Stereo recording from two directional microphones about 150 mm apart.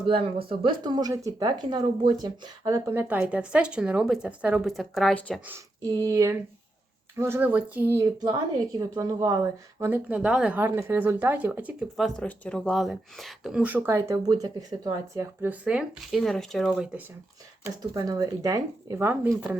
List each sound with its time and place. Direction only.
0.1 s speech: 40° right (ahead or behind); by 5.4 s centre (ahead or behind)
6.0 s speech: 20° right (ahead or behind)
9.0 s speech: 25° right (ahead or behind)
11.9 s speech: 5° left (ahead or behind)
17.9 s speech: 25° right (ahead or behind); by 19.5 s 10° right (ahead or behind)